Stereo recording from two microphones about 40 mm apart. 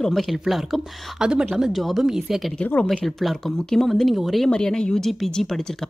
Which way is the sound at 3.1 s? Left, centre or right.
Centre.